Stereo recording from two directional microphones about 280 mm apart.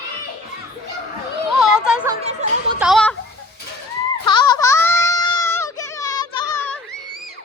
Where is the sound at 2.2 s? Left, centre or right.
Right.